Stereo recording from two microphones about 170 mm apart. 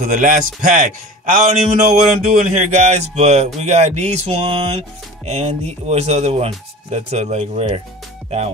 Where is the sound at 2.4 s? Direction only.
45° right (ahead or behind).